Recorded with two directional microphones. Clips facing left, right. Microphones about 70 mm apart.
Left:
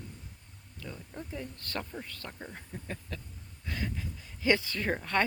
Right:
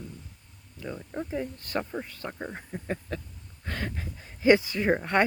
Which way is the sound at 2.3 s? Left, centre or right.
Right.